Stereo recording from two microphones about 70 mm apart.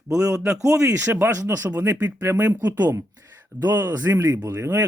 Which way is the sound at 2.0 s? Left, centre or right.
Right.